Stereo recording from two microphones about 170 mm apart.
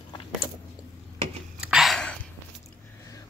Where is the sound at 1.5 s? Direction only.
5° right (ahead or behind).